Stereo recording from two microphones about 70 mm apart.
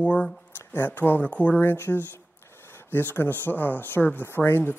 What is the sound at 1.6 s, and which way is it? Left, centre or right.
Speech, left.